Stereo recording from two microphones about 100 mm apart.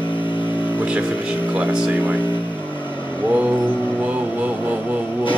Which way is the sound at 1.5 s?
10° right (ahead or behind).